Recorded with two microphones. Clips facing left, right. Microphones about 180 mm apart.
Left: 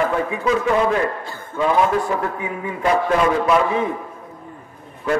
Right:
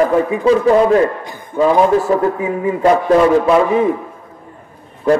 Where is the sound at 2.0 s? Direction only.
35° right (ahead or behind).